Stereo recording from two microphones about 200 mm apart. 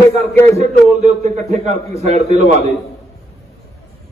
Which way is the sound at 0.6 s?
35° right (ahead or behind).